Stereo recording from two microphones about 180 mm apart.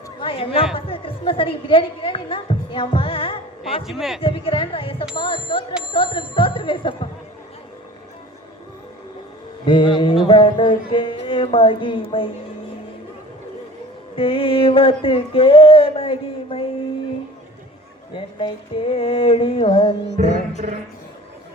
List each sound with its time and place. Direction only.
0.2 s a woman's voice: 30° left (ahead or behind)
3.8 s speech: centre (ahead or behind)
4.2 s music: 30° left (ahead or behind)
5.1 s speech: 25° left (ahead or behind)
5.9 s bicycle bell: 30° left (ahead or behind)
9.6 s music: 30° left (ahead or behind)
14.2 s a sound: 30° left (ahead or behind)
18.1 s a sound: 30° left (ahead or behind)
20.2 s music: 45° right (ahead or behind)